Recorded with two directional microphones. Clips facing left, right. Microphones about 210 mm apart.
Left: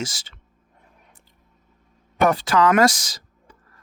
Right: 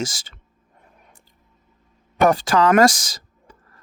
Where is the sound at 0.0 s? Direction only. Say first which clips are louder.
Right 3 dB; 45° right (ahead or behind).